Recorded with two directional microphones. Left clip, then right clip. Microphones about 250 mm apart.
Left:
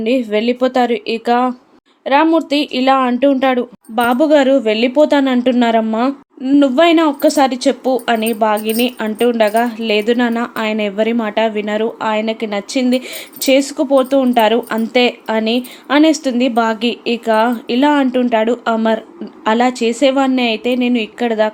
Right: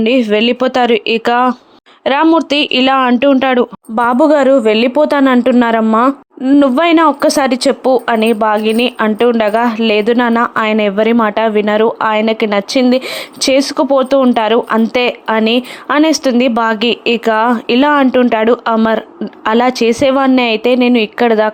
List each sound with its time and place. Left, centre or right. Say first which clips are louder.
0.0 s speech: right 4 dB; centre